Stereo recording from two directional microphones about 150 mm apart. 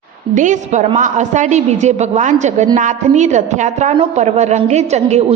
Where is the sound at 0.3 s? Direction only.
55° right (ahead or behind).